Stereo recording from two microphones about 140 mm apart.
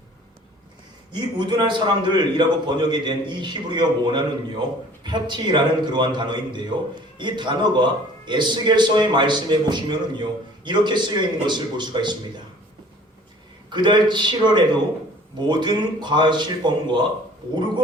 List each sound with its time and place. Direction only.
1.1 s a man's voice: 35° right (ahead or behind)
13.7 s a man's voice: 35° right (ahead or behind)